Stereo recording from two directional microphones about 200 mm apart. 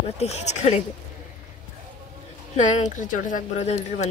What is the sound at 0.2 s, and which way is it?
Speech, 35° left (ahead or behind).